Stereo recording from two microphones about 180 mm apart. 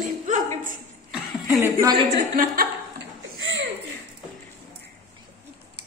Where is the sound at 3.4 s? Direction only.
90° right.